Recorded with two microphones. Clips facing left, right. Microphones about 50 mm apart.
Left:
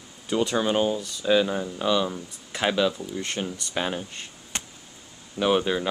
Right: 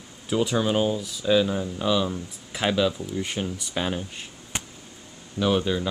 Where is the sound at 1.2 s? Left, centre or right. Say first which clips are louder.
Even; centre.